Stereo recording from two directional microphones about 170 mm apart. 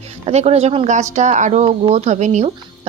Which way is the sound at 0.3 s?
40° right (ahead or behind).